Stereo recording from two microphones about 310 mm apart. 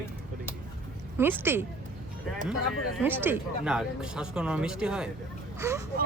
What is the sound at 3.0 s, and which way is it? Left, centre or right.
Speech, centre.